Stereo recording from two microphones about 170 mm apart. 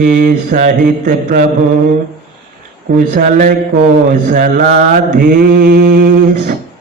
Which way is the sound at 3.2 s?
50° right (ahead or behind).